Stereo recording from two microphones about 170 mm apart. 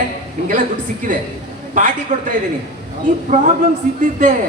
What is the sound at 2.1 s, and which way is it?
Speech, 50° right (ahead or behind).